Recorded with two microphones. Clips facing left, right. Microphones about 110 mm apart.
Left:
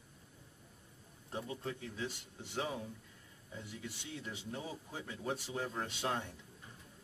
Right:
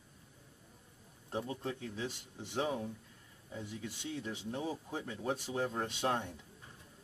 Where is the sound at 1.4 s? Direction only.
40° right (ahead or behind).